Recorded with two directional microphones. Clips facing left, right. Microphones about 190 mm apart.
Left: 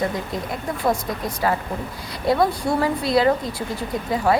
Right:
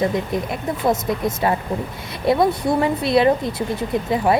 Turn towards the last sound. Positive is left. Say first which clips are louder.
# right 4 dB
turn(degrees=-25)  # may be behind; listen again after turning